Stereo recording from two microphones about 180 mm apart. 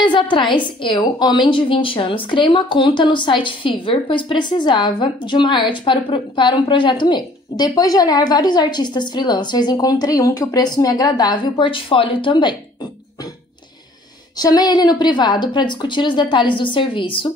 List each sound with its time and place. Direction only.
0.0 s a woman's voice: 25° left (ahead or behind)
14.3 s a woman's voice: 20° left (ahead or behind)